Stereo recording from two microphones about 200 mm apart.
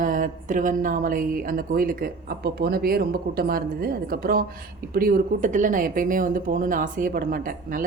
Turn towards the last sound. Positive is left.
turn(degrees=-45)  # may be behind; listen again after turning